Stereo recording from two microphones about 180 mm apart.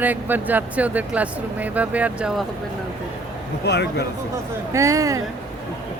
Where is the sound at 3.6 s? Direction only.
70° left (ahead or behind).